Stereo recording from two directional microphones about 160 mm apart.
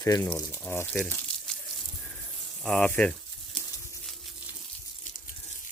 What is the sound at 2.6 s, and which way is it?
Speech, 5° left (ahead or behind).